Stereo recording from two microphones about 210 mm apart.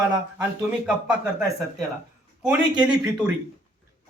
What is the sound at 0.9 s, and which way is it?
Speech, 5° right (ahead or behind).